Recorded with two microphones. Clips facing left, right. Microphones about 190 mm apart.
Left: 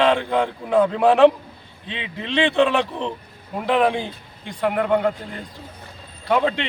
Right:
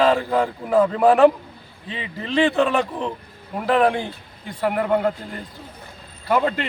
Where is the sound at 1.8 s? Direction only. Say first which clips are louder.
Even; 90° left.